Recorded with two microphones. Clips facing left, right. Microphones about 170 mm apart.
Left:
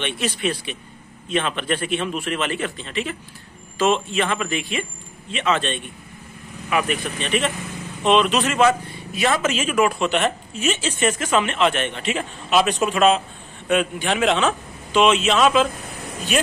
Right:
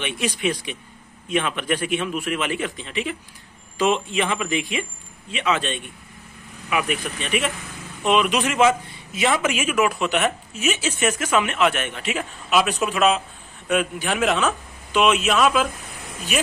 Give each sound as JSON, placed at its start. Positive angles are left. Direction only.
{"t": 0.0, "sound": "a man's voice", "side_deg": -10}